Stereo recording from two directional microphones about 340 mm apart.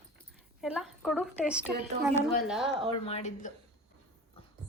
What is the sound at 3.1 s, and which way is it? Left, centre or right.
Speech, centre.